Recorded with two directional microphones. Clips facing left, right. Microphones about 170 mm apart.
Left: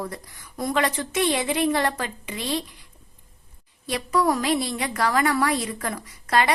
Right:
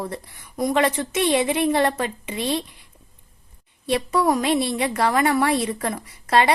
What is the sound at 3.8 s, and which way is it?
A woman's voice, 25° right (ahead or behind).